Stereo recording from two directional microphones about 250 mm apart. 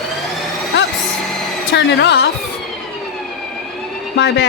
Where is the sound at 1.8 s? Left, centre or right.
Left.